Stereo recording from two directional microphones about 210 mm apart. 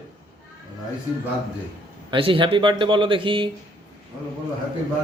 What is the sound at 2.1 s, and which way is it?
Speech, 25° right (ahead or behind).